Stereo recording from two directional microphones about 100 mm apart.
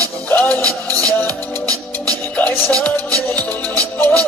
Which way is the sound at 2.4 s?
15° left (ahead or behind).